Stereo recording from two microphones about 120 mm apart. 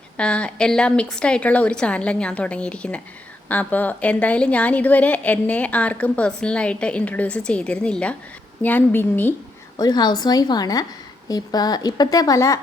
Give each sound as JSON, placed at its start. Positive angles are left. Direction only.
{"t": 0.2, "sound": "a woman's voice", "side_deg": 10}
{"t": 9.7, "sound": "speech", "side_deg": 35}